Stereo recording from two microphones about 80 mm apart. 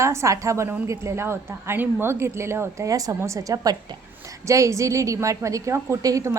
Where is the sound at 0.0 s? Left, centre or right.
Right.